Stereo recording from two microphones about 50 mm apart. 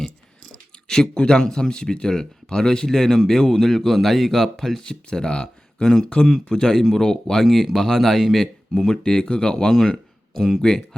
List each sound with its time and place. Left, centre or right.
0.9 s a man's voice: centre
4.9 s a man's voice: centre